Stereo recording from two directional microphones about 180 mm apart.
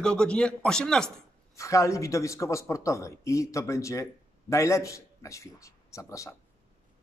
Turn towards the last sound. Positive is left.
turn(degrees=15)  # may be behind; listen again after turning